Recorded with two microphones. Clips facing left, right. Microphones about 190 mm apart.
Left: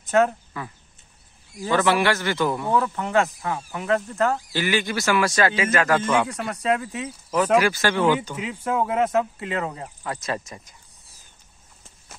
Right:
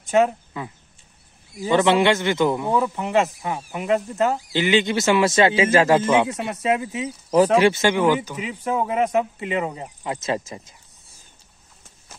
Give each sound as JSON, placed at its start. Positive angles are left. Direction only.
{"t": 0.2, "sound": "speech", "side_deg": -15}
{"t": 3.0, "sound": "speech", "side_deg": -5}
{"t": 3.4, "sound": "speech", "side_deg": -15}
{"t": 10.1, "sound": "speech", "side_deg": -25}